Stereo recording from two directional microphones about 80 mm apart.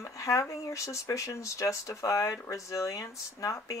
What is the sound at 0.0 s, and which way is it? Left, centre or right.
Speech, left.